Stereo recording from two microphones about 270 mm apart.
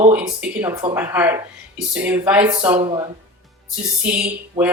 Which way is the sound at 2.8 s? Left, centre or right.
Centre.